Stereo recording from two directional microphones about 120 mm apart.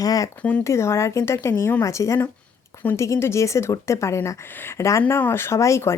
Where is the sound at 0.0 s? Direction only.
30° left (ahead or behind).